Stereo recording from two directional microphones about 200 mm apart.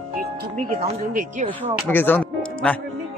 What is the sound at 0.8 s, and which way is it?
Speech, 40° right (ahead or behind).